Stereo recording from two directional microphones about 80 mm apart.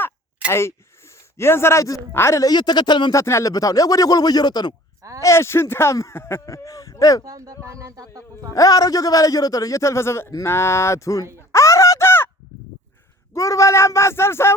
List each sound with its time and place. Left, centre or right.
1.4 s speech: left
2.4 s speech: left
3.1 s a man's voice: left
5.2 s speech: left
6.4 s a man's voice: left
7.3 s speech: right
8.5 s a man's voice: left
11.3 s a sound: left
13.3 s speech: left